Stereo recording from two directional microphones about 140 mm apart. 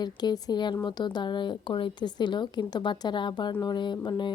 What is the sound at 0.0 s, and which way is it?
A woman's voice, 30° left (ahead or behind).